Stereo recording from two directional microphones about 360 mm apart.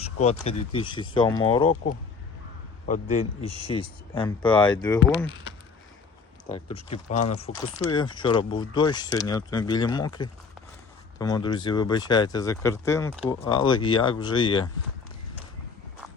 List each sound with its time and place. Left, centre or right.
0.2 s speech: centre
2.8 s a man's voice: centre
6.5 s speech: centre